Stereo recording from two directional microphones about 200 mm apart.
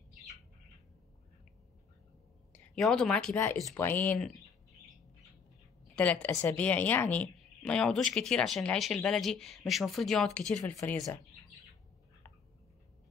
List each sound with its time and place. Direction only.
2.5 s speech: 5° left (ahead or behind)
5.9 s a woman's voice: 5° left (ahead or behind)
10.6 s speech: 15° left (ahead or behind)